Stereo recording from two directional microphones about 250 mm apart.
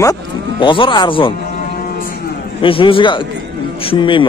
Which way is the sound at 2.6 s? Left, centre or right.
Left.